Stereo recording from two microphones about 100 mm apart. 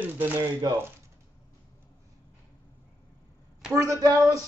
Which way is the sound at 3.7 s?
30° right (ahead or behind).